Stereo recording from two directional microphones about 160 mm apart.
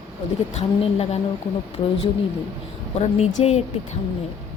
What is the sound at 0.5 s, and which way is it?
Speech, 40° left (ahead or behind).